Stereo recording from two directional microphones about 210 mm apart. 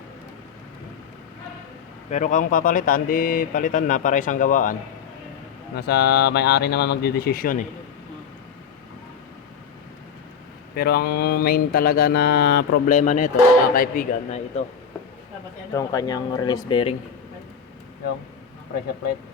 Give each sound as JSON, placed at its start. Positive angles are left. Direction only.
{"t": 2.0, "sound": "speech", "side_deg": 35}
{"t": 5.7, "sound": "mantra", "side_deg": 50}
{"t": 10.8, "sound": "mantra", "side_deg": 50}
{"t": 12.9, "sound": "speech", "side_deg": 35}
{"t": 15.7, "sound": "speech", "side_deg": 15}